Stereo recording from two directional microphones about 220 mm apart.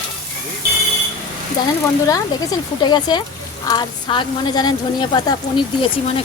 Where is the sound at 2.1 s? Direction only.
20° left (ahead or behind).